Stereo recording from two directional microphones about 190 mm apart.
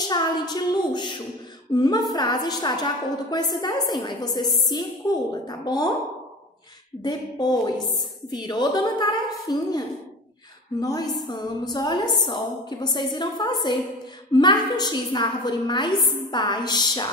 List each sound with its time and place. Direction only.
0.1 s a woman's voice: 25° left (ahead or behind)
7.0 s a woman's voice: 20° left (ahead or behind)